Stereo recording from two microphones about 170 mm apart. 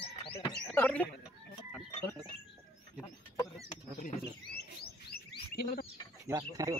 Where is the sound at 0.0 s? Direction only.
30° left (ahead or behind).